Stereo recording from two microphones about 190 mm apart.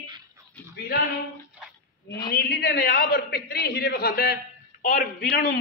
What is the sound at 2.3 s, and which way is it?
A man's voice, 55° left (ahead or behind).